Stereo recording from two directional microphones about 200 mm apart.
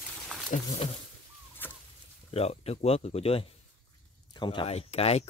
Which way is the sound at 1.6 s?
10° left (ahead or behind).